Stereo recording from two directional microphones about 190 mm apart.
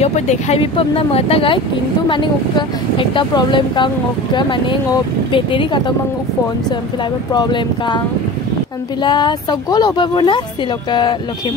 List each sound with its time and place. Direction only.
0.0 s speech: 35° left (ahead or behind)
7.3 s speech: 25° left (ahead or behind)
9.0 s speech: 25° left (ahead or behind)